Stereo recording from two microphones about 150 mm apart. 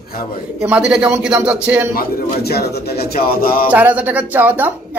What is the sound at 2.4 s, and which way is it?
Speech, 90° left.